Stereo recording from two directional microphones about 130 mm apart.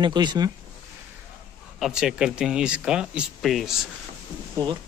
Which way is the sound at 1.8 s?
5° right (ahead or behind).